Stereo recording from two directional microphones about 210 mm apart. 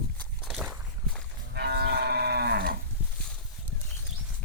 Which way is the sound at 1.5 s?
50° right (ahead or behind).